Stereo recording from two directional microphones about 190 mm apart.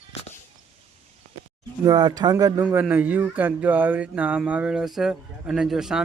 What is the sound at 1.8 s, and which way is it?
Speech, 20° right (ahead or behind).